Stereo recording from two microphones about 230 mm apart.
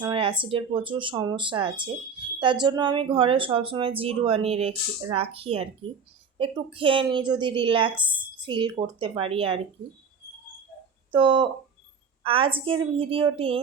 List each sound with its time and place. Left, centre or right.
0.0 s speech: right
11.1 s speech: right